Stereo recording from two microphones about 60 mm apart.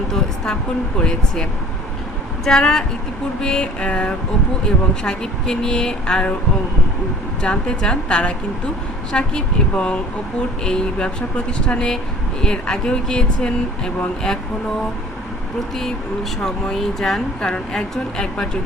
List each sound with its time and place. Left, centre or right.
0.1 s a sound: centre
0.9 s speech: centre
7.4 s speech: centre
16.4 s speech: centre